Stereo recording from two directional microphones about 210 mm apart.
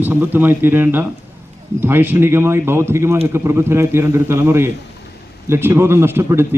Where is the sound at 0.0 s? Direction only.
10° right (ahead or behind).